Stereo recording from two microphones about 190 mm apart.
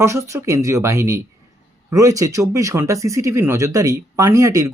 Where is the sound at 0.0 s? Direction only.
15° right (ahead or behind).